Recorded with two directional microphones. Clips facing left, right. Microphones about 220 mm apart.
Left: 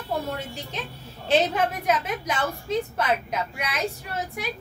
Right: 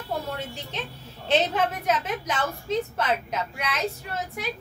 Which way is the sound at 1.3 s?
10° left (ahead or behind).